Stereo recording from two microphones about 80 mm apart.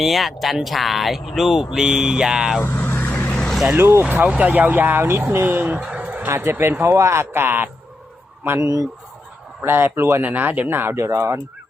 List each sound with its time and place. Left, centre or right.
0.0 s speech: centre
2.6 s vehicle: left
3.8 s speech: right
5.8 s a sound: centre
6.3 s speech: right
9.6 s speech: right
10.2 s speech: right